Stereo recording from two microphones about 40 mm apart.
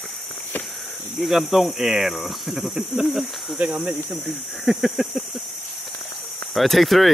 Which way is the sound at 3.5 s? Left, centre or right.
Right.